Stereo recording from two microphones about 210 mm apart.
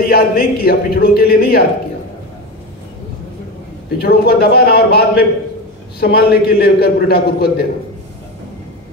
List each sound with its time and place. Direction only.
0.0 s a man's voice: 45° left (ahead or behind)
4.0 s a man's voice: 45° left (ahead or behind)